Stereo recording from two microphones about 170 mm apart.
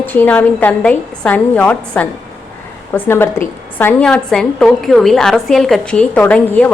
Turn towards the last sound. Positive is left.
turn(degrees=10)  # may be behind; listen again after turning